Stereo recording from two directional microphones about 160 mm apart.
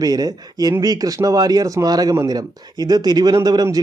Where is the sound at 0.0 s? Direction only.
25° right (ahead or behind).